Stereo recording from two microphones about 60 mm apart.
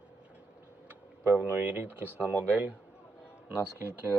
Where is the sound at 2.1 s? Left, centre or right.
Left.